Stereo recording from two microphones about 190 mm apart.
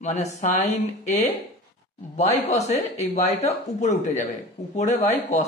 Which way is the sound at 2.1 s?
35° left (ahead or behind).